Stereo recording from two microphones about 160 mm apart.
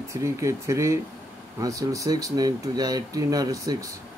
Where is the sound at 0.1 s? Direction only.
20° right (ahead or behind).